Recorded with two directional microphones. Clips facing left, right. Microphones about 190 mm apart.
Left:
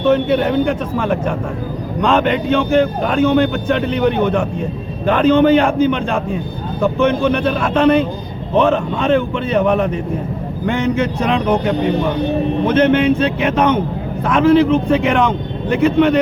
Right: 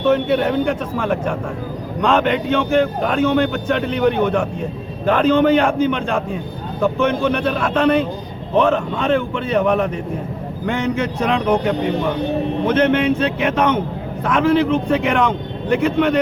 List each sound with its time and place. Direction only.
0.0 s a man's voice: 20° left (ahead or behind)
12.7 s a man's voice: 30° left (ahead or behind)